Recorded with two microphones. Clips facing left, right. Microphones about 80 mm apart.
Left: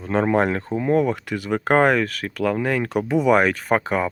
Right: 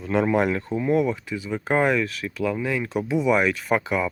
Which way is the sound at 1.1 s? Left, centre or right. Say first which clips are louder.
Left 5 dB; left.